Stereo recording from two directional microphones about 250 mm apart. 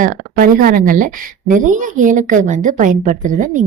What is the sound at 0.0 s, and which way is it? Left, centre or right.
A woman's voice, right.